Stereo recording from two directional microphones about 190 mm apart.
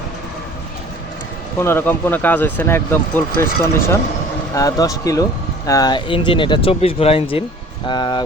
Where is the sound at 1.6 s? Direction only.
10° left (ahead or behind).